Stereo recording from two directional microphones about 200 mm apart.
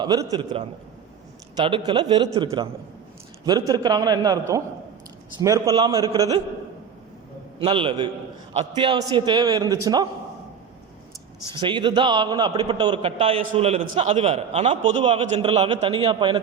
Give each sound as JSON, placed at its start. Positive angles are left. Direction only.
{"t": 0.0, "sound": "a man's voice", "side_deg": -20}
{"t": 7.6, "sound": "a man's voice", "side_deg": -25}
{"t": 11.5, "sound": "a man's voice", "side_deg": -25}